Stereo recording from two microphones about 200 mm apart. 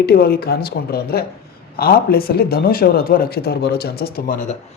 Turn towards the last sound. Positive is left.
turn(degrees=40)  # may be behind; listen again after turning